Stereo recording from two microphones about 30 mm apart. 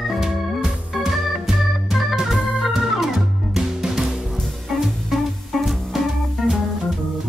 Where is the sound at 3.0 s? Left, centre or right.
Centre.